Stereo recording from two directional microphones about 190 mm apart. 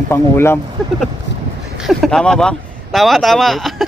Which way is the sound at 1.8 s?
Centre (ahead or behind).